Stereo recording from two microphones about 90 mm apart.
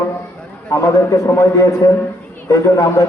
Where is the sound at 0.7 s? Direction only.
35° left (ahead or behind).